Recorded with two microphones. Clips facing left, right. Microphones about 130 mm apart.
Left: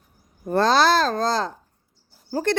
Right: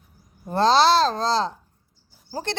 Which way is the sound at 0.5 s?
50° left (ahead or behind).